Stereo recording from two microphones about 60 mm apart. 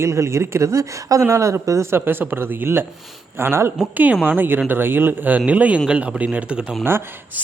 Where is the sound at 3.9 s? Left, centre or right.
Right.